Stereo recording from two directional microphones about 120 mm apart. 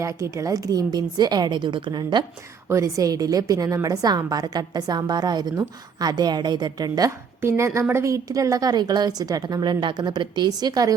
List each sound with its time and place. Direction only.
0.0 s a woman's voice: 25° right (ahead or behind)
2.6 s a woman's voice: 25° right (ahead or behind)